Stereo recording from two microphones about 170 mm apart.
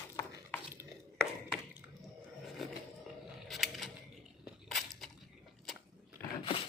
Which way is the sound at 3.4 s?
Centre (ahead or behind).